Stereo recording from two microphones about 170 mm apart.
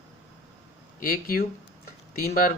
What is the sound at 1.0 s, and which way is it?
Speech, 60° left (ahead or behind).